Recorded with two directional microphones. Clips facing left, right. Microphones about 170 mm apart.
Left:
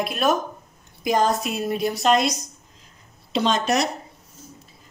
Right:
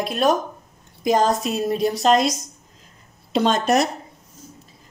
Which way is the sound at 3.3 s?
50° right (ahead or behind).